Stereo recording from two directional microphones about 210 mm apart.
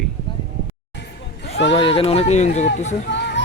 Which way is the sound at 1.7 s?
25° left (ahead or behind).